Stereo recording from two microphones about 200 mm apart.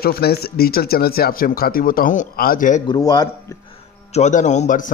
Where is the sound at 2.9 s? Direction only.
20° left (ahead or behind).